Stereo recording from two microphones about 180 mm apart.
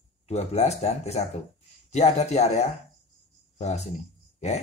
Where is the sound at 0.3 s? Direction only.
35° left (ahead or behind).